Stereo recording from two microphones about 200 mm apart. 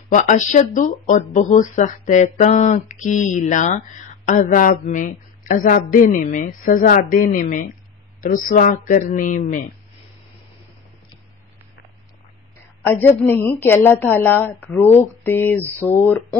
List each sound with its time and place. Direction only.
0.1 s speech: 40° left (ahead or behind)
12.8 s a woman's voice: 10° left (ahead or behind)